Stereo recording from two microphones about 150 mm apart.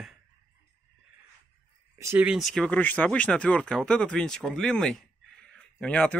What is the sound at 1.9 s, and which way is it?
Speech, 15° right (ahead or behind).